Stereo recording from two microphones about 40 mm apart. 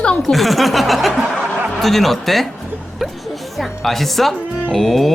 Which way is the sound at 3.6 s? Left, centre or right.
Centre.